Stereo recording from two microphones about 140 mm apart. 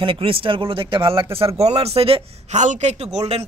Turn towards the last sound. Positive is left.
turn(degrees=-50)  # may be behind; listen again after turning